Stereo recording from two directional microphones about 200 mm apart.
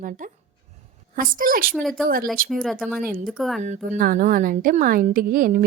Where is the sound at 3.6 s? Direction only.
40° right (ahead or behind).